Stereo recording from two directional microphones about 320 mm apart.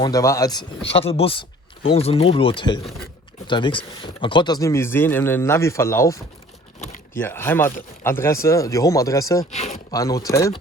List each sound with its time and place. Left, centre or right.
0.0 s speech: centre
6.7 s power windows: left
7.1 s speech: centre
9.6 s a sound: left
10.0 s speech: centre